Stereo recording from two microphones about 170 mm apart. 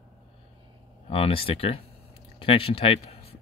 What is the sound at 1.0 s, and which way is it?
Speech, 35° left (ahead or behind).